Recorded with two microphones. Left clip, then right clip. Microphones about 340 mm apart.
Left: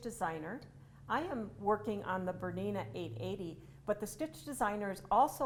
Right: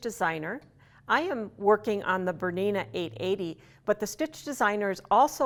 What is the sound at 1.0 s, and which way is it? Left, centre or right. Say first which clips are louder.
A woman's voice: right 10 dB; right.